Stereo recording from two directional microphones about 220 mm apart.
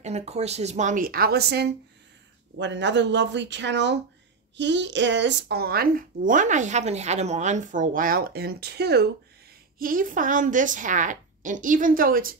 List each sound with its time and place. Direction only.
0.0 s speech: 30° right (ahead or behind)